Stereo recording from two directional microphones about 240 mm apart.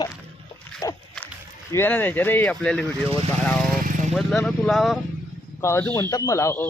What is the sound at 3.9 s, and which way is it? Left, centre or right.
Vehicle, right.